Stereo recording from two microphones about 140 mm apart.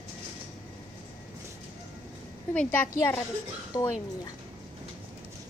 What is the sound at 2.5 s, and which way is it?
A woman's voice, 15° left (ahead or behind).